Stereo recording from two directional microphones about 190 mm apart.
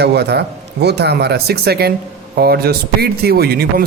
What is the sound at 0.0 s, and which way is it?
Speech, 60° right (ahead or behind).